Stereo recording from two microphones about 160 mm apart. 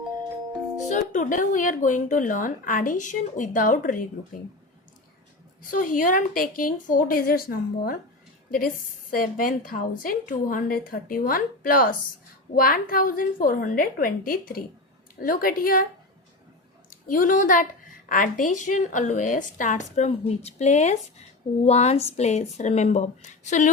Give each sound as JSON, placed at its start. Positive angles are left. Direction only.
{"t": 0.9, "sound": "a woman's voice", "side_deg": 50}
{"t": 5.6, "sound": "a woman's voice", "side_deg": 55}
{"t": 16.9, "sound": "a woman's voice", "side_deg": 60}